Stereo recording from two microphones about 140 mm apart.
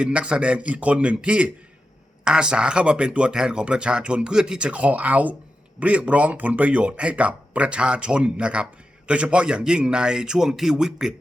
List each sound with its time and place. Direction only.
0.0 s speech: 10° right (ahead or behind)